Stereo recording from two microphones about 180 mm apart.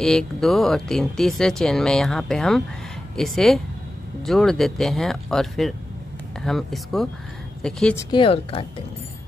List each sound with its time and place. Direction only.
0.0 s speech: 5° left (ahead or behind)
8.0 s speech: 25° left (ahead or behind)